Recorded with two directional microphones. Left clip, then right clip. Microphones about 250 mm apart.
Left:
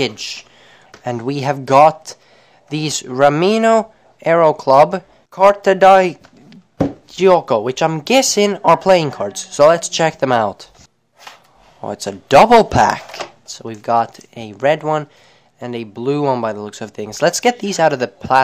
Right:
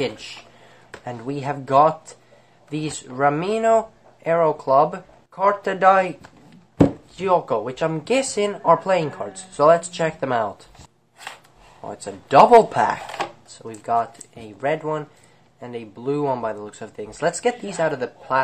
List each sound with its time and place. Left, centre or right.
0.2 s speech: left
11.8 s speech: left